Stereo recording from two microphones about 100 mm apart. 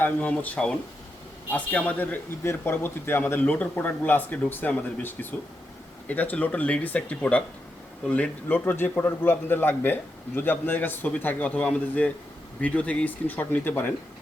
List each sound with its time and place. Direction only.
0.0 s a man's voice: 15° left (ahead or behind)